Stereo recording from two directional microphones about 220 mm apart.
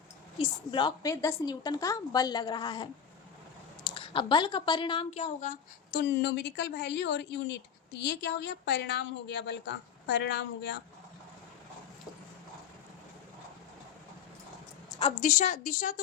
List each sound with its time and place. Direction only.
0.3 s a woman's voice: 20° left (ahead or behind)
5.9 s a woman's voice: 50° left (ahead or behind)
15.2 s speech: 35° left (ahead or behind)